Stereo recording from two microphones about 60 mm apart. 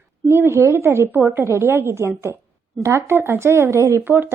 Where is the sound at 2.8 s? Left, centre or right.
Right.